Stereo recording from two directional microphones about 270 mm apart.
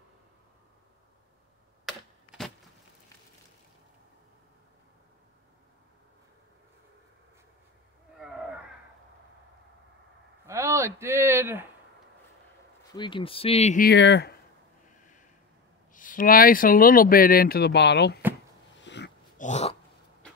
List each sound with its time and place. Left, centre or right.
1.9 s typewriter: centre
10.4 s a sound: centre
12.9 s speech: centre; by 14.3 s left
15.9 s speech: left
18.8 s dog: left